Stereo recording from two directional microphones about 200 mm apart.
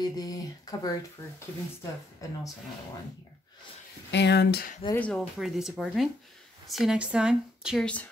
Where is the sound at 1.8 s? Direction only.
15° left (ahead or behind).